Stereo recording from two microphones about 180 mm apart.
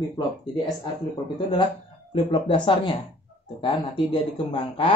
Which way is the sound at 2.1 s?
30° left (ahead or behind).